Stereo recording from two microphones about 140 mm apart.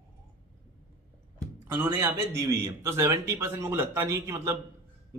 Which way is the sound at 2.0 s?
20° right (ahead or behind).